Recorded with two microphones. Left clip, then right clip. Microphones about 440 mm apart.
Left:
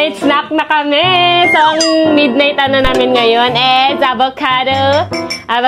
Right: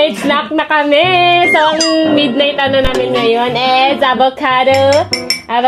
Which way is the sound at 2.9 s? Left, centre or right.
Centre.